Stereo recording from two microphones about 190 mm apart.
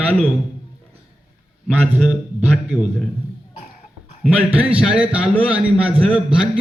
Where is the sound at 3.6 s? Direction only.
45° left (ahead or behind).